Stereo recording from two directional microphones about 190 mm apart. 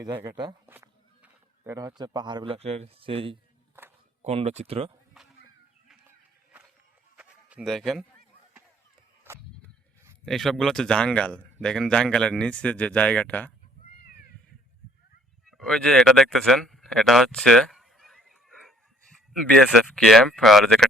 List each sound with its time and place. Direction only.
0.0 s speech: 10° right (ahead or behind)
0.3 s speech: 20° right (ahead or behind)
0.7 s a sound: 10° right (ahead or behind)
2.0 s speech: 20° right (ahead or behind)
3.8 s a sound: 10° right (ahead or behind)
4.2 s speech: 35° right (ahead or behind)
6.1 s a sound: 10° right (ahead or behind)
10.2 s speech: centre (ahead or behind)
14.0 s cat: 50° left (ahead or behind)
15.5 s speech: 5° left (ahead or behind)